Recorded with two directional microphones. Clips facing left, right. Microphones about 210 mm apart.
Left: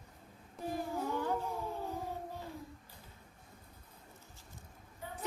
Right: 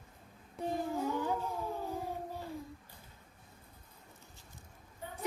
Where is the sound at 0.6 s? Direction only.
15° right (ahead or behind).